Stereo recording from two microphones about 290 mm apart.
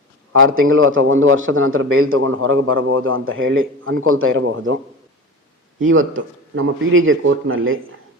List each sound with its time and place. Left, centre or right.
0.6 s a man's voice: right
5.8 s a man's voice: right